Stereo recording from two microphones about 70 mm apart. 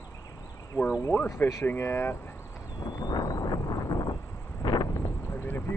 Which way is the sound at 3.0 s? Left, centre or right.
Left.